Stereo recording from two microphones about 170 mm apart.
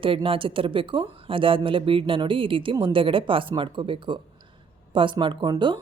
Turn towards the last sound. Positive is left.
turn(degrees=-25)  # may be behind; listen again after turning